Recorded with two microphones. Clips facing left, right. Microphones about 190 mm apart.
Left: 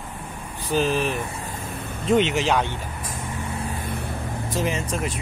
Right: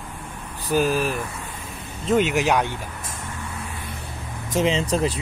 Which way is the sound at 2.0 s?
Centre (ahead or behind).